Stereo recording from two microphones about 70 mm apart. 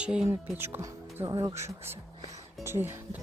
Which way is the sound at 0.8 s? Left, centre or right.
Right.